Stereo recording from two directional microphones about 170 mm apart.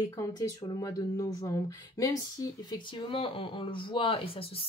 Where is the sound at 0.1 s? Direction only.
20° left (ahead or behind).